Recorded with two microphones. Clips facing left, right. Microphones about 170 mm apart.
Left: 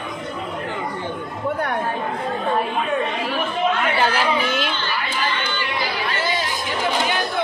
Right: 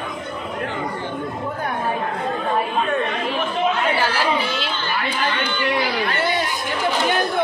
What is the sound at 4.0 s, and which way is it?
Chatter, 15° left (ahead or behind).